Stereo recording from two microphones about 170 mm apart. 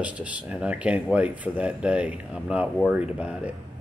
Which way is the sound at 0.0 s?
5° right (ahead or behind).